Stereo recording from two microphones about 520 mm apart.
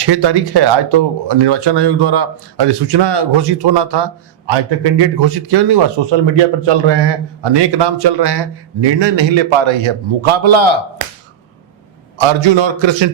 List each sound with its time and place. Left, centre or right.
0.0 s speech: right
12.1 s a man's voice: right